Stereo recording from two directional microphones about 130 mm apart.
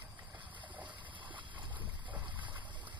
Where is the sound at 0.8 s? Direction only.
40° right (ahead or behind).